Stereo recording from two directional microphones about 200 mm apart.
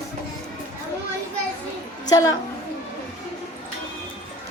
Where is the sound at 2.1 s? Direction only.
15° left (ahead or behind).